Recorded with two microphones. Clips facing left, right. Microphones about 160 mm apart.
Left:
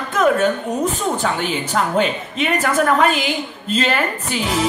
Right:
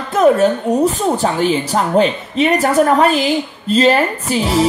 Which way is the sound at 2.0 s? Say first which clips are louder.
Right 5 dB; 35° right (ahead or behind).